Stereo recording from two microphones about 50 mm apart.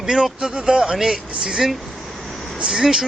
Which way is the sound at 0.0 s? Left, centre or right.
Centre.